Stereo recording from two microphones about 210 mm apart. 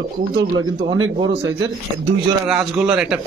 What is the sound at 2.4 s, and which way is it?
Speech, 5° right (ahead or behind).